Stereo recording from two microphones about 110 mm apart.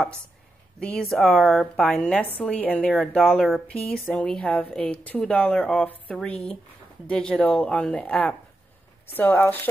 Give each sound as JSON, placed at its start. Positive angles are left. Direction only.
{"t": 0.7, "sound": "speech", "side_deg": 10}